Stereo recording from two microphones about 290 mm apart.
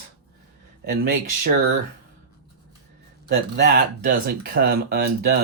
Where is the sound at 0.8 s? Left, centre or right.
Right.